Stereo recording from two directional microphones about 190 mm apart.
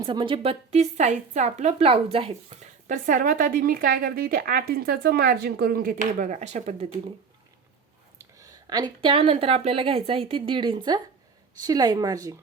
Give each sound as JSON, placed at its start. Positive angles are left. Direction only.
{"t": 0.0, "sound": "a woman's voice", "side_deg": -25}
{"t": 8.4, "sound": "a woman's voice", "side_deg": -20}